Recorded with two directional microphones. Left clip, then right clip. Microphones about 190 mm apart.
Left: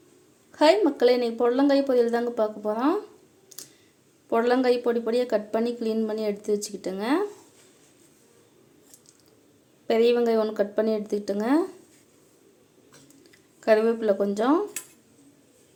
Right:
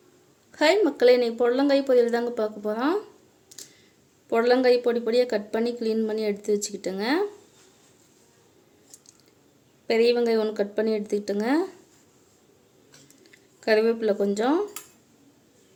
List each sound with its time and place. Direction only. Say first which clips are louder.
0.5 s speech: left 1 dB; 20° right (ahead or behind)
4.3 s speech: right 2 dB; 15° right (ahead or behind)
9.8 s speech: even; 15° right (ahead or behind)
13.6 s speech: left 1 dB; 15° right (ahead or behind)